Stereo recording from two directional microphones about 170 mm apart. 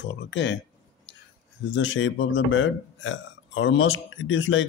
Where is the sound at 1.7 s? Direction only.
90° left.